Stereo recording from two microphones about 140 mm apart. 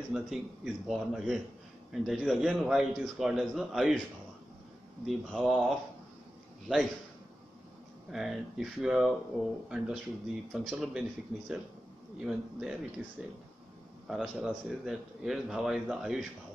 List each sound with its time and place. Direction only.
0.1 s a man's voice: 5° right (ahead or behind)
5.0 s a man's voice: centre (ahead or behind)
8.1 s a man's voice: centre (ahead or behind)
14.0 s a man's voice: centre (ahead or behind)